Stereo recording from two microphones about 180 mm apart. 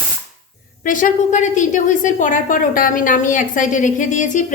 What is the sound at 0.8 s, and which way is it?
A woman's voice, 45° left (ahead or behind).